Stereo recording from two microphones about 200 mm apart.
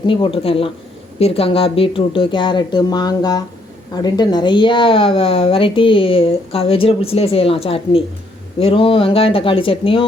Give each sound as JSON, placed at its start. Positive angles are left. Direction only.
{"t": 0.0, "sound": "speech", "side_deg": 25}